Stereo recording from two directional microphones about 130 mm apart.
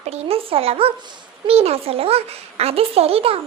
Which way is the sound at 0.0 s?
50° right (ahead or behind).